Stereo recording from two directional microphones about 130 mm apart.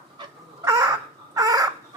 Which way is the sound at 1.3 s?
25° right (ahead or behind).